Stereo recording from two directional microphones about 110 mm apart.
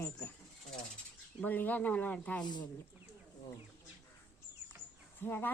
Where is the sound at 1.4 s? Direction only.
15° left (ahead or behind).